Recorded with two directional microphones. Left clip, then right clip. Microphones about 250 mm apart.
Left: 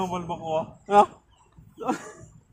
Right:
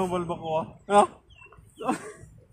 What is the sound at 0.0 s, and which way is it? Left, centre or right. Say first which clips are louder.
Speech: right 1 dB; right.